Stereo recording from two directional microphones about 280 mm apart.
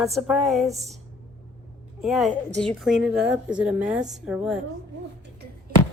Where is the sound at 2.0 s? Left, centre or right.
Centre.